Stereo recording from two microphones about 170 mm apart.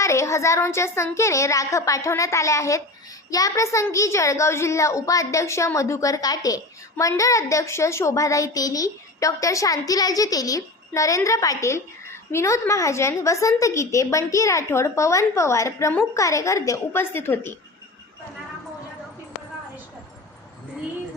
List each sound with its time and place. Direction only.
0.0 s a child's voice: 15° left (ahead or behind)